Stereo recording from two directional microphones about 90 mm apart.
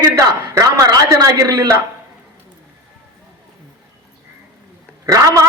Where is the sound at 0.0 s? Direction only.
35° right (ahead or behind).